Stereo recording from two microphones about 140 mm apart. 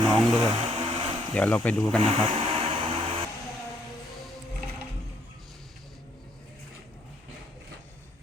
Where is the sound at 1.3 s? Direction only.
10° left (ahead or behind).